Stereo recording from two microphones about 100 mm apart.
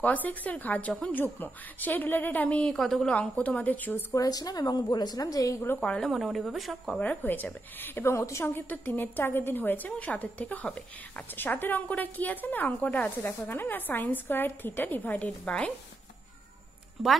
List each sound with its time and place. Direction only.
0.0 s a woman's voice: 15° left (ahead or behind)
4.1 s speech: 35° left (ahead or behind)
5.8 s speech: 10° left (ahead or behind)
6.9 s a woman's voice: 15° left (ahead or behind)
8.6 s a woman's voice: 20° left (ahead or behind)
17.0 s speech: 5° right (ahead or behind)